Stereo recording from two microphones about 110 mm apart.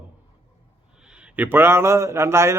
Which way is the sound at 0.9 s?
10° right (ahead or behind).